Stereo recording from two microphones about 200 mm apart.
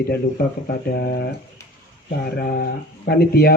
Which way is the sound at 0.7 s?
50° left (ahead or behind).